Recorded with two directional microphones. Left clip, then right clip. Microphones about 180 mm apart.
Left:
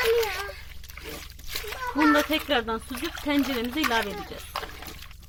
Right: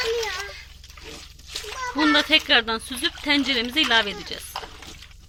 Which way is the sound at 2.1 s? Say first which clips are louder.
Right 5 dB; centre (ahead or behind).